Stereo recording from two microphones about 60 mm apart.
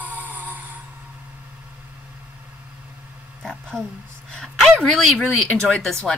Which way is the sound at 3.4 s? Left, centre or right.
Centre.